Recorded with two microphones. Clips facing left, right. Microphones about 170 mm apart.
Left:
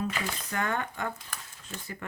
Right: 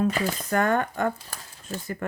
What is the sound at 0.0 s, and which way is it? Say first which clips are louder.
Speech: right 8 dB; 50° right (ahead or behind).